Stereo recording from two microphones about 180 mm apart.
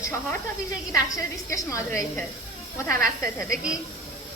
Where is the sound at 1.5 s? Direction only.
15° left (ahead or behind).